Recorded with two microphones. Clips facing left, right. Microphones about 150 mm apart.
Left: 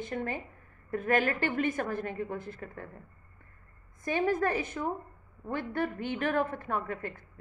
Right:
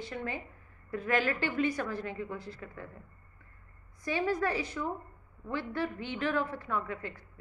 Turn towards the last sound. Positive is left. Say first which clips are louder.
# left 1 dB
turn(degrees=50)  # may be behind; listen again after turning